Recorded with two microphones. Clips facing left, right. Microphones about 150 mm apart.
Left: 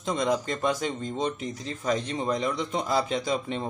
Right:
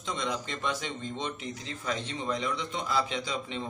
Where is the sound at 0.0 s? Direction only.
45° left (ahead or behind).